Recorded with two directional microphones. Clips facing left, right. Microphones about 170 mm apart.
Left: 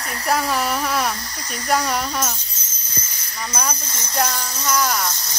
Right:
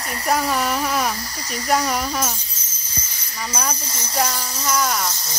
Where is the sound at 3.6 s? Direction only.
Centre (ahead or behind).